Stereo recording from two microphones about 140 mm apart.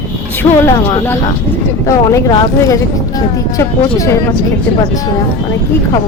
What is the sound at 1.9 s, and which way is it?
Speech, 25° left (ahead or behind).